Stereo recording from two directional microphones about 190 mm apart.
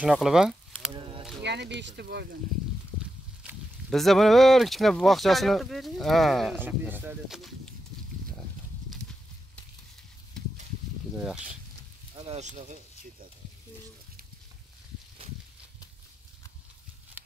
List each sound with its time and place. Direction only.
0.0 s speech: 5° right (ahead or behind)
0.9 s a sound: 25° right (ahead or behind)
1.4 s speech: 65° right (ahead or behind)
3.0 s speech: centre (ahead or behind)
10.4 s a sound: 5° left (ahead or behind)
12.3 s speech: 35° right (ahead or behind)